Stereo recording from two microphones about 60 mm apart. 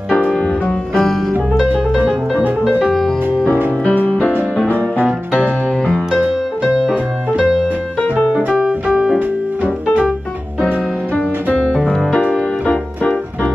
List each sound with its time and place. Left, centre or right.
0.3 s music: centre
0.9 s music: centre
2.9 s music: centre
3.8 s music: left
4.6 s music: right
5.9 s music: centre
6.6 s music: centre
8.8 s piano: centre
11.5 s music: centre
12.1 s music: centre